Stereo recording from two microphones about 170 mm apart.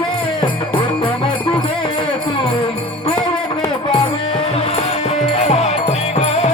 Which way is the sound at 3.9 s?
35° left (ahead or behind).